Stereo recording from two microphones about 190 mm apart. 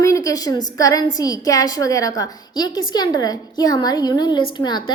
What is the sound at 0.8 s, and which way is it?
A woman's voice, 20° left (ahead or behind).